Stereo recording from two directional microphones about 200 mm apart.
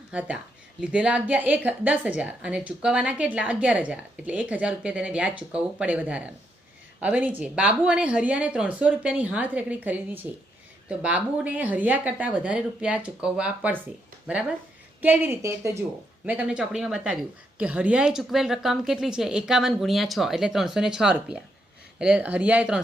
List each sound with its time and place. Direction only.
0.1 s a woman's voice: 5° right (ahead or behind)